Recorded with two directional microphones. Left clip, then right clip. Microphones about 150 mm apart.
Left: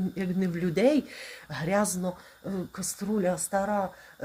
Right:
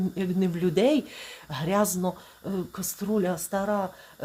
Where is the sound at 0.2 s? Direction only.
20° right (ahead or behind).